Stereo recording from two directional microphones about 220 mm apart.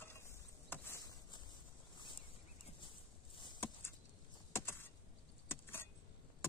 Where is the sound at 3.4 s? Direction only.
15° left (ahead or behind).